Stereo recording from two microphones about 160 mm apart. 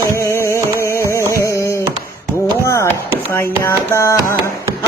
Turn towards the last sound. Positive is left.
turn(degrees=20)  # may be behind; listen again after turning